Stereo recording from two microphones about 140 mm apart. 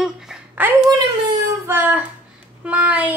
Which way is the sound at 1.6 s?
15° right (ahead or behind).